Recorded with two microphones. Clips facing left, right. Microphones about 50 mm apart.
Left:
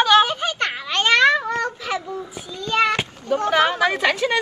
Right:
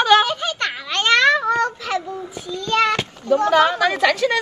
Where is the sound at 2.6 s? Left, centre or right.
Centre.